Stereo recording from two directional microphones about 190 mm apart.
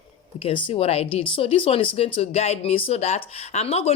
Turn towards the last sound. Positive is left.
turn(degrees=35)  # may be behind; listen again after turning